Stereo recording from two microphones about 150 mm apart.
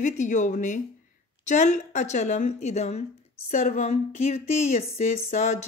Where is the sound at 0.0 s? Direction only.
55° left (ahead or behind).